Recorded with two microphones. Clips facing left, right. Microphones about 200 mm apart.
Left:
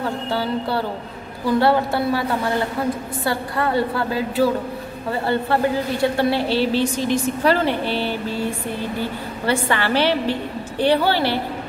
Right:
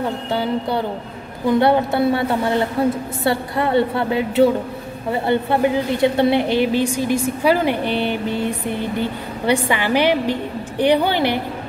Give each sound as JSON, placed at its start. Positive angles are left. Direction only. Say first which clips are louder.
{"t": 0.3, "sound": "a woman's voice", "louder": "right 2 dB", "side_deg": -20}